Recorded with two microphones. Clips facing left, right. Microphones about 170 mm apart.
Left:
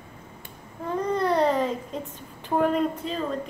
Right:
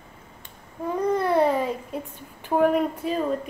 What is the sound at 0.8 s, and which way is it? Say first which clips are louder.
A woman's voice: right 2 dB; 10° right (ahead or behind).